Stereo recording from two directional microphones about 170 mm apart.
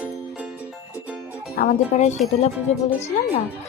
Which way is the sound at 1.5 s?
45° left (ahead or behind).